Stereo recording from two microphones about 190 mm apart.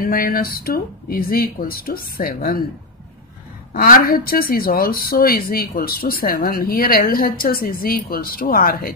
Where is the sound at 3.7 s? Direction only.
50° left (ahead or behind).